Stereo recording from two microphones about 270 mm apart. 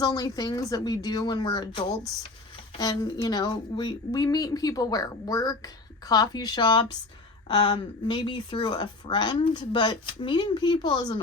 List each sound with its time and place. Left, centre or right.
0.0 s a woman's voice: centre